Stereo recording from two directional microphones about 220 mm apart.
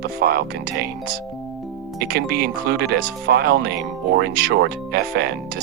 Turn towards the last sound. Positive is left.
turn(degrees=-45)  # may be behind; listen again after turning